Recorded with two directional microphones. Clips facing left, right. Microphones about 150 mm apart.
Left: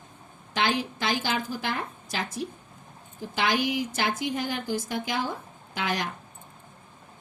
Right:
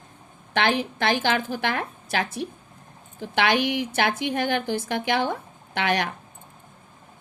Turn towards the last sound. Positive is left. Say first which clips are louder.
# right 5 dB
turn(degrees=-65)  # may be behind; listen again after turning